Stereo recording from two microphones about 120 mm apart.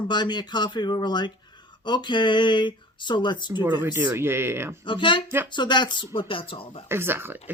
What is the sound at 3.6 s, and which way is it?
Speech, 20° right (ahead or behind).